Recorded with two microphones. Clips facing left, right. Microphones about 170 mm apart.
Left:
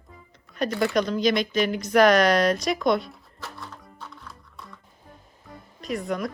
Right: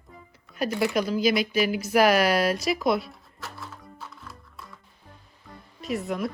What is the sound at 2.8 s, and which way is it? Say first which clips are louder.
Music: left 2 dB; 5° right (ahead or behind).